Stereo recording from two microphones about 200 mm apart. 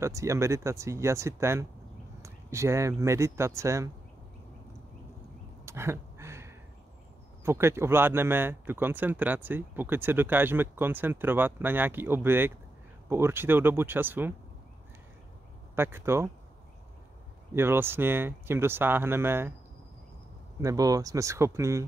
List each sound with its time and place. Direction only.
0.0 s speech: 15° right (ahead or behind)
5.7 s a sound: 15° right (ahead or behind)
7.4 s speech: 10° right (ahead or behind)
15.7 s speech: 10° right (ahead or behind)
17.6 s speech: 10° right (ahead or behind)
20.6 s speech: 15° right (ahead or behind)